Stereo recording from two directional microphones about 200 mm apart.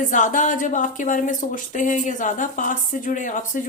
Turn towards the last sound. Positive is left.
turn(degrees=40)  # may be behind; listen again after turning